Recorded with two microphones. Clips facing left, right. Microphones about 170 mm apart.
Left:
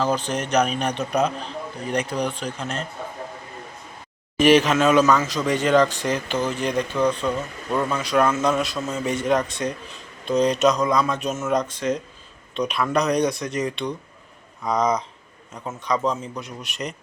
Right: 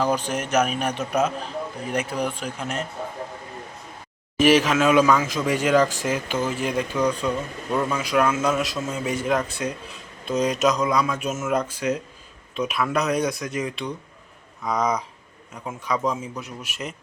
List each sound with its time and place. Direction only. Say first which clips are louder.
0.0 s speech: even; 10° right (ahead or behind)
4.4 s speech: left 1 dB; centre (ahead or behind)